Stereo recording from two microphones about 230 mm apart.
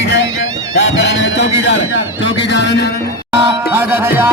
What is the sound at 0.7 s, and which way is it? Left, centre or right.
Music, left.